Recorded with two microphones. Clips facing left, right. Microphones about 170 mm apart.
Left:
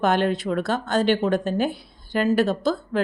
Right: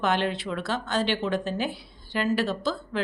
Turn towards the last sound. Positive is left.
turn(degrees=45)  # may be behind; listen again after turning